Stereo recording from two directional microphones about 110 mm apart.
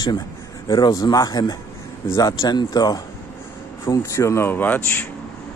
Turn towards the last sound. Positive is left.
turn(degrees=15)  # may be behind; listen again after turning